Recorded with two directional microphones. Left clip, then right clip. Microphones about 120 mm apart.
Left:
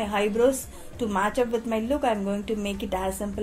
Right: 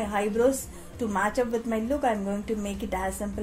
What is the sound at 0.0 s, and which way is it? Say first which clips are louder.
A woman's voice: left 2 dB; 35° left (ahead or behind).